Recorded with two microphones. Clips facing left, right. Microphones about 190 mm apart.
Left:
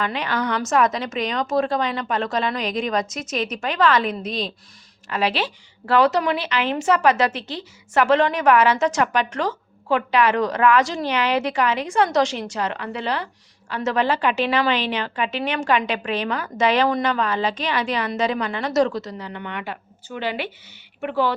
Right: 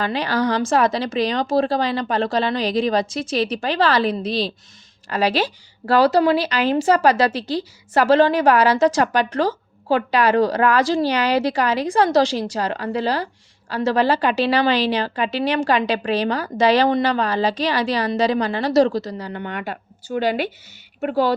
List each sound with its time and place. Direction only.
0.0 s a woman's voice: 35° right (ahead or behind)